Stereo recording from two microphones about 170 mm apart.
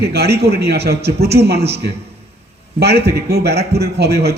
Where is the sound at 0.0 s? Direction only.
70° right (ahead or behind).